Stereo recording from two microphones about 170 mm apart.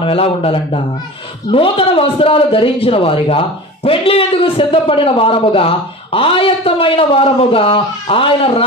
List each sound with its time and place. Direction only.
0.0 s a man's voice: 35° left (ahead or behind)